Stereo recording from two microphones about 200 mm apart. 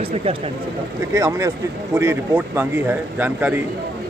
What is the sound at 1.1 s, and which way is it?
Speech, 15° right (ahead or behind).